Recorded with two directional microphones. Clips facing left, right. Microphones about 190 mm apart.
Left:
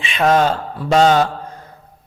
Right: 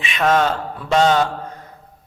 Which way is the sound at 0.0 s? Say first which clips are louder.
Left 2 dB; 30° left (ahead or behind).